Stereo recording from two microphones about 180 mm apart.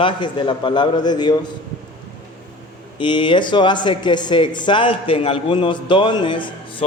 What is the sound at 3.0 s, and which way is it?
Speech, 25° left (ahead or behind).